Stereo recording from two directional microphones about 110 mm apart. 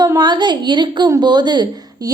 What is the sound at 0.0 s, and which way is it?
A woman's voice, 40° right (ahead or behind).